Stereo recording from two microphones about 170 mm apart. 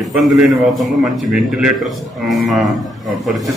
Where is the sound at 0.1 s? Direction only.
Centre (ahead or behind).